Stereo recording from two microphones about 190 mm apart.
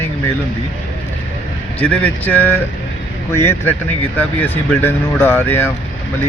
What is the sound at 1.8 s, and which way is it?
Speech, 5° left (ahead or behind).